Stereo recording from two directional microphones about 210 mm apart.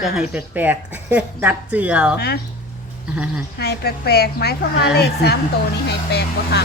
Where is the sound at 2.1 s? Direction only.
50° left (ahead or behind).